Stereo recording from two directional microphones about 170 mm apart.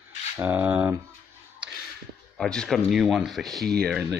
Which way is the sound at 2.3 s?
5° left (ahead or behind).